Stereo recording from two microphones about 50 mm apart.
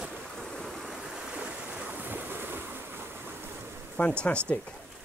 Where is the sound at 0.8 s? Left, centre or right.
Centre.